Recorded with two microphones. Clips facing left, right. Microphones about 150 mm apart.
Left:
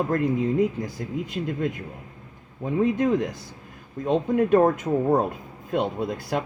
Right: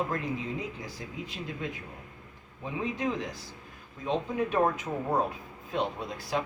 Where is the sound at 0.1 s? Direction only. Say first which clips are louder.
Left 10 dB; 50° left (ahead or behind).